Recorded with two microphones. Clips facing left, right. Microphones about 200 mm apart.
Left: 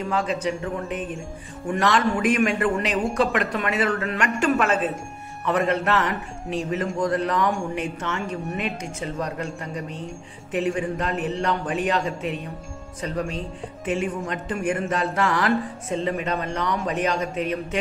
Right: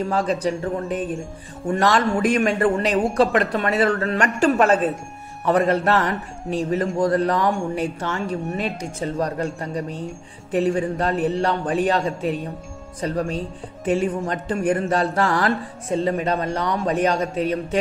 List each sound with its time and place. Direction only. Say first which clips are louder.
0.1 s a man's voice: right 3 dB; 35° right (ahead or behind)